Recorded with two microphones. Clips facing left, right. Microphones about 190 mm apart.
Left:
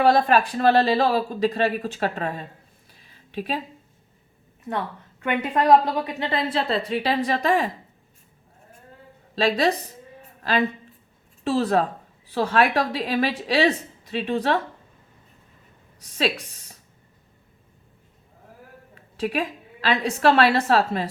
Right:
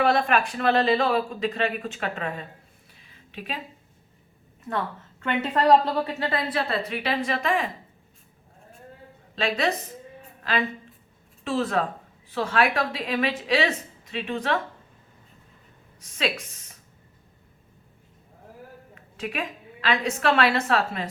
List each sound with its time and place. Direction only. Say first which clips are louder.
0.0 s speech: left 4 dB; 35° left (ahead or behind)
3.3 s speech: left 7 dB; 40° left (ahead or behind)
5.2 s a woman's voice: left 1 dB; 15° left (ahead or behind); by 7.7 s 35° left (ahead or behind)
9.3 s a woman's voice: left 4 dB; 35° left (ahead or behind)
11.4 s speech: left 4 dB; 35° left (ahead or behind)
16.1 s speech: left 3 dB; 35° left (ahead or behind)
19.1 s speech: left 6 dB; 35° left (ahead or behind)